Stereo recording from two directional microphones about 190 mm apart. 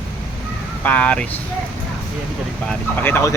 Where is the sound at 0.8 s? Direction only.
5° left (ahead or behind).